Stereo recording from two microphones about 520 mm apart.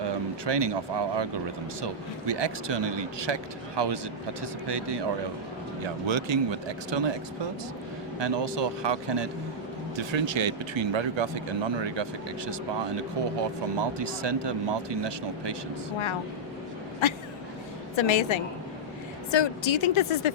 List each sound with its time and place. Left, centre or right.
0.0 s speech: right
8.2 s speech: right
13.7 s speech: right
17.9 s speech: left